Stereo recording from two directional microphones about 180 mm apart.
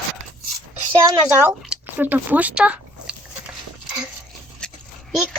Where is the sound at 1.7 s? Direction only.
10° right (ahead or behind).